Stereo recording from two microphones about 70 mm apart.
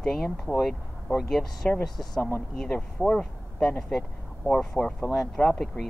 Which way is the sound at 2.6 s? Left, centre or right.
Centre.